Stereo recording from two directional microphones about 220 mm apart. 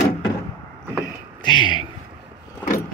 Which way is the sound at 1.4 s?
20° left (ahead or behind).